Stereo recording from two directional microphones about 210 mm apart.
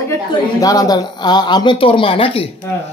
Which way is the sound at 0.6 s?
15° left (ahead or behind).